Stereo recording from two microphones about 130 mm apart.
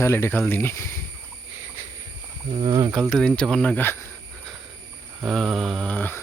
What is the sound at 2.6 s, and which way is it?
Speech, 40° right (ahead or behind).